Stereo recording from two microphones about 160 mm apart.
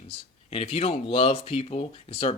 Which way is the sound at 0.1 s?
40° left (ahead or behind).